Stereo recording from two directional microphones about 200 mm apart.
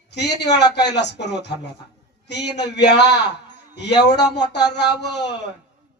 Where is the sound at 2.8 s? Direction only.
60° left (ahead or behind).